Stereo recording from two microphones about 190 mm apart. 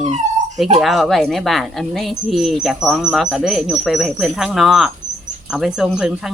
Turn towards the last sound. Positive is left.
turn(degrees=-5)  # may be behind; listen again after turning